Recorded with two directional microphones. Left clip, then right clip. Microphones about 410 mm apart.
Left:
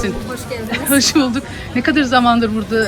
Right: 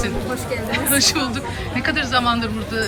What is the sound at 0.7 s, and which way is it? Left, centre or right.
Speech, centre.